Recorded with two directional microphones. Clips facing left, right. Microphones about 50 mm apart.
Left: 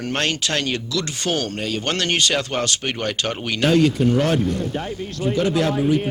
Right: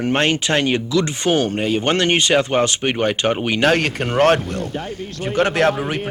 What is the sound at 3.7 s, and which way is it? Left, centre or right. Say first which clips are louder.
Speech: left 6 dB; right.